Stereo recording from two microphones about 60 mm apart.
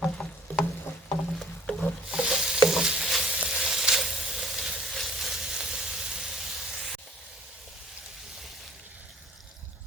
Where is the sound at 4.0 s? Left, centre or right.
Centre.